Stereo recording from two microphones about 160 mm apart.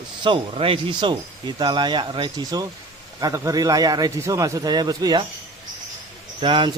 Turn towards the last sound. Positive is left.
turn(degrees=-30)  # may be behind; listen again after turning